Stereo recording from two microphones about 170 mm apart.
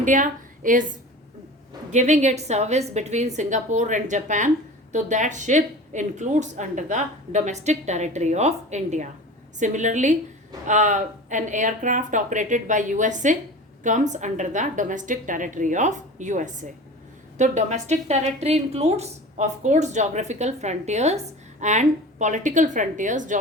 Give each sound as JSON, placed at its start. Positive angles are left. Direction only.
{"t": 0.0, "sound": "a woman's voice", "side_deg": -50}
{"t": 1.9, "sound": "a woman's voice", "side_deg": -45}